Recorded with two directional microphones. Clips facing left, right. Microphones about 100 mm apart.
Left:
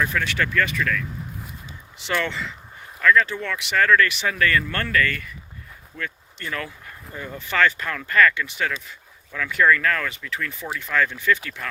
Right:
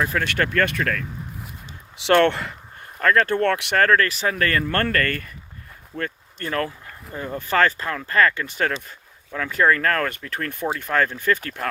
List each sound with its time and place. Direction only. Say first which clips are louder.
0.0 s speech: right 1 dB; 35° right (ahead or behind)
0.3 s speech: right 2 dB; 50° right (ahead or behind)
2.0 s speech: right 9 dB; 70° right (ahead or behind); by 8.4 s 35° right (ahead or behind)
8.4 s speech: right 3 dB; 45° right (ahead or behind)